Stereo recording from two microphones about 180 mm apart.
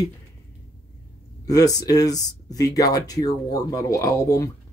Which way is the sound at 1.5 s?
20° left (ahead or behind).